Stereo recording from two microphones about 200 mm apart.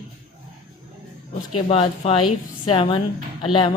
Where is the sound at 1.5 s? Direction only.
30° left (ahead or behind).